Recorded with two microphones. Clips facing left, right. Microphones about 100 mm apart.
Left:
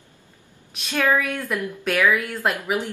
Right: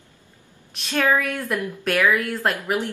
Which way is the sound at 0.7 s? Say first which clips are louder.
Even; centre (ahead or behind).